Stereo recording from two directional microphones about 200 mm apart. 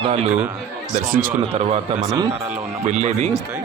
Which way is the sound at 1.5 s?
30° right (ahead or behind).